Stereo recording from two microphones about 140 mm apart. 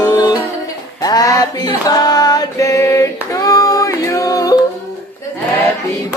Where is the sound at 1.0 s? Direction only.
25° left (ahead or behind).